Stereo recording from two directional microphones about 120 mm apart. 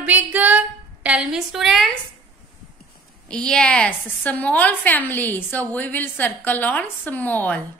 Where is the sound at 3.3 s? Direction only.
5° left (ahead or behind).